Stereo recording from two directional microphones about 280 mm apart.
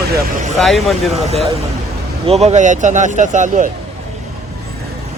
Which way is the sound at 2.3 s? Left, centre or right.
Right.